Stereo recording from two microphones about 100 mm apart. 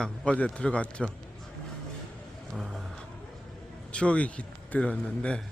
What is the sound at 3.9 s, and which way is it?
A man's voice, 10° left (ahead or behind).